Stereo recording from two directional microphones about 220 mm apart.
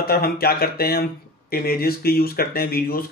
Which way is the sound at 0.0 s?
45° left (ahead or behind).